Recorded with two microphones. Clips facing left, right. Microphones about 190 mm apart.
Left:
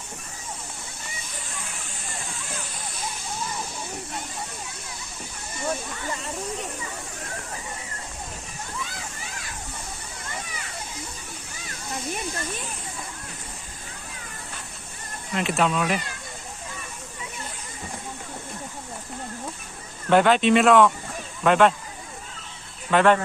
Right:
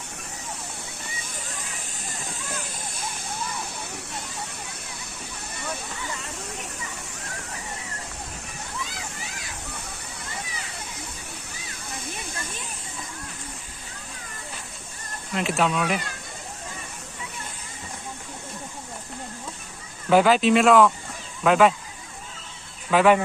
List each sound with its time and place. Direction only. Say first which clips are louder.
11.7 s hiss: left 6 dB; 55° left (ahead or behind)
15.3 s speech: even; centre (ahead or behind)
20.1 s speech: even; 5° right (ahead or behind)
22.9 s speech: right 1 dB; 5° right (ahead or behind)